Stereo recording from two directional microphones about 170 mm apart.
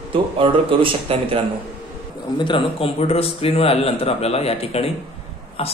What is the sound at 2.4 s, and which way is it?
A man's voice, 30° left (ahead or behind).